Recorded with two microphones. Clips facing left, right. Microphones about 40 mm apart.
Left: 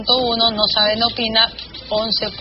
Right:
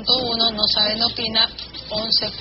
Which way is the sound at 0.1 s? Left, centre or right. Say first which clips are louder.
Left 4 dB; left.